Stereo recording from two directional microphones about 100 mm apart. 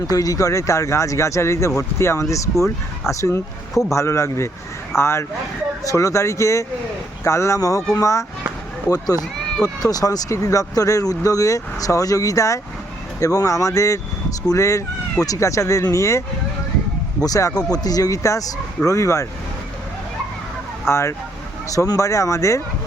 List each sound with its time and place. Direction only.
0.1 s a man's voice: 35° left (ahead or behind)
20.8 s a man's voice: 25° left (ahead or behind)